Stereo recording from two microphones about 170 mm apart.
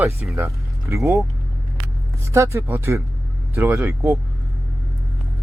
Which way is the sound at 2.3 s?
15° right (ahead or behind).